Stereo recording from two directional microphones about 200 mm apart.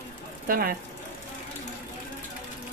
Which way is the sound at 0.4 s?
45° right (ahead or behind).